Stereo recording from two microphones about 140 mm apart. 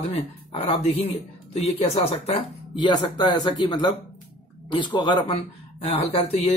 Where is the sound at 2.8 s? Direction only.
30° left (ahead or behind).